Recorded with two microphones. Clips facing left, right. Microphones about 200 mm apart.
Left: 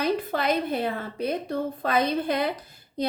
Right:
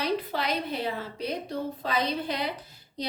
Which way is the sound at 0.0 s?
50° left (ahead or behind).